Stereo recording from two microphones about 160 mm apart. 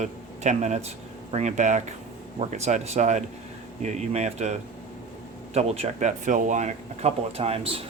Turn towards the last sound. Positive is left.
turn(degrees=-40)  # may be behind; listen again after turning